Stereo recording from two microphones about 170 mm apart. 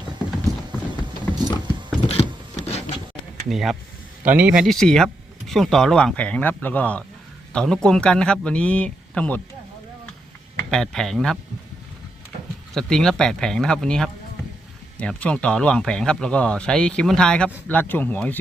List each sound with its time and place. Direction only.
1.2 s clip-clop: 10° left (ahead or behind)
2.0 s a sound: 40° left (ahead or behind)
3.5 s speech: centre (ahead or behind)
10.6 s speech: 5° left (ahead or behind)
12.7 s speech: 5° left (ahead or behind)